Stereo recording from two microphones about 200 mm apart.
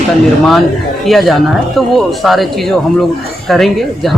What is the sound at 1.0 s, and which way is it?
Speech, centre (ahead or behind).